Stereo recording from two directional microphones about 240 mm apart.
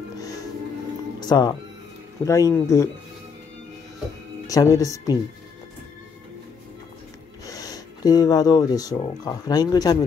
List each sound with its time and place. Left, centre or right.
1.2 s speech: centre
4.5 s speech: centre
7.4 s speech: centre